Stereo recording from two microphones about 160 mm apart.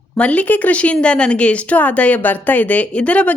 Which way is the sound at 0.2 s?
10° left (ahead or behind).